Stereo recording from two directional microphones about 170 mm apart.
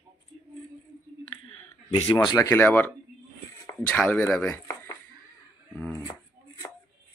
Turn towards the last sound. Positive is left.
turn(degrees=10)  # may be behind; listen again after turning